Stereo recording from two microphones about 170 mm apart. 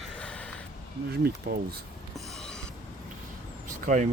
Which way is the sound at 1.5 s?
65° right (ahead or behind).